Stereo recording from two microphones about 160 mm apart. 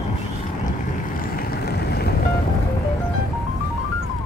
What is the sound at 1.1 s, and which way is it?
Vehicle, 75° left (ahead or behind).